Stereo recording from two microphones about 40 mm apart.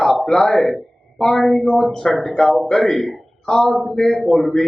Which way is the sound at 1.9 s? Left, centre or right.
Centre.